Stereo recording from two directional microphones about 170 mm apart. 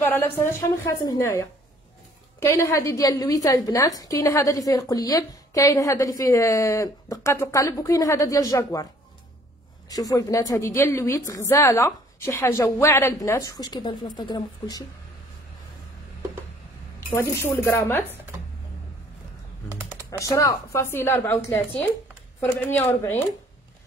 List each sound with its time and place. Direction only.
0.0 s a woman's voice: 10° left (ahead or behind)
9.8 s a woman's voice: 20° left (ahead or behind)
17.1 s speech: 15° left (ahead or behind)
19.7 s typing: 10° right (ahead or behind)
20.1 s speech: 20° left (ahead or behind)